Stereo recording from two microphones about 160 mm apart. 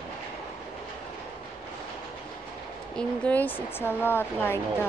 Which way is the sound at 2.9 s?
10° left (ahead or behind).